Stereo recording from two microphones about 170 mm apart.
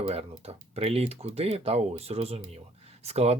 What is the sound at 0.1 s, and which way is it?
Speech, 35° right (ahead or behind).